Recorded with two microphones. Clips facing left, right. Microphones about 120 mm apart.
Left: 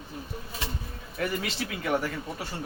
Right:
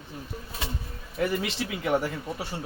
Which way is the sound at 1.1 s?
20° right (ahead or behind).